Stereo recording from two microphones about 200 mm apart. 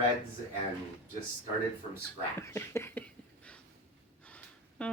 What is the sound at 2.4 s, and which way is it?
Speech, 15° left (ahead or behind).